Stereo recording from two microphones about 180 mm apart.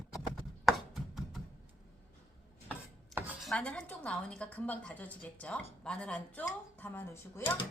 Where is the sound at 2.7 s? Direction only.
10° right (ahead or behind).